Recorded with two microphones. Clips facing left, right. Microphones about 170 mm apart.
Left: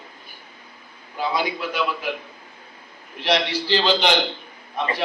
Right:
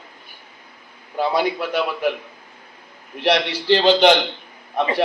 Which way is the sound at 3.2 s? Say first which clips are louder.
Right 3 dB; 60° right (ahead or behind).